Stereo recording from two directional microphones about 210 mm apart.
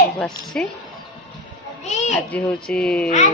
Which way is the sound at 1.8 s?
35° left (ahead or behind).